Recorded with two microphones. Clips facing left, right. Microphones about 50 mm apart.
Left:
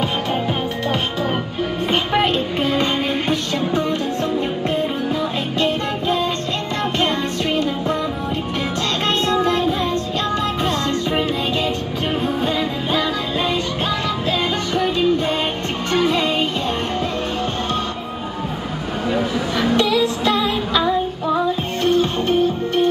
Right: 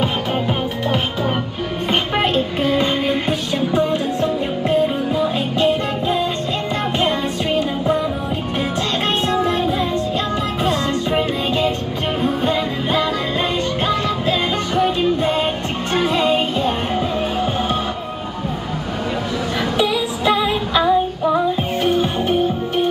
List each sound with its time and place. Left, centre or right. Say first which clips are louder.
2.1 s music: even; centre
2.8 s music: right 1 dB; right
9.3 s music: left 1 dB; right
11.1 s music: right 1 dB; centre
14.8 s music: right 1 dB; right
19.8 s music: left 1 dB; centre